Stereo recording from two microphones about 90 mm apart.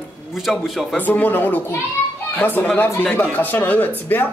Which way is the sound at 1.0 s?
20° left (ahead or behind).